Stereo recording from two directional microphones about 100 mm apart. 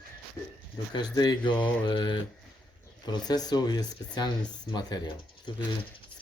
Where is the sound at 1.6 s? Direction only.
10° left (ahead or behind).